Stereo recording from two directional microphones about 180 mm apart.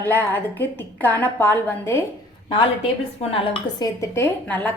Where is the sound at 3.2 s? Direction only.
30° left (ahead or behind).